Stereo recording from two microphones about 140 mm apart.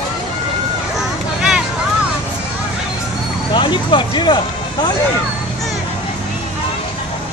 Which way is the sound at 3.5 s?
35° left (ahead or behind).